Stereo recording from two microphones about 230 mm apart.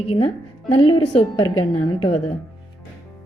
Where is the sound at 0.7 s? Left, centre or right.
Left.